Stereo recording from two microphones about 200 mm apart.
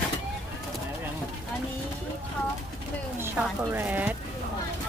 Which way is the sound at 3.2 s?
10° right (ahead or behind).